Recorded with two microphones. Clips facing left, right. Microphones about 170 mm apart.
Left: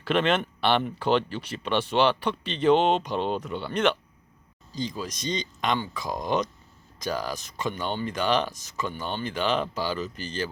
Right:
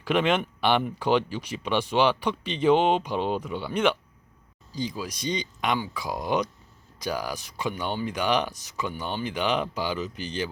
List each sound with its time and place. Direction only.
0.0 s speech: 10° right (ahead or behind)